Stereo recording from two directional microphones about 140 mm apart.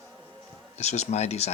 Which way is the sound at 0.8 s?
55° left (ahead or behind).